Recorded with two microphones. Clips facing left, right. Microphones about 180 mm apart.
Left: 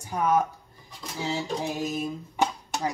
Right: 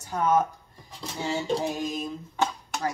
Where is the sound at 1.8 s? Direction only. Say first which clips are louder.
Left 1 dB; 5° left (ahead or behind).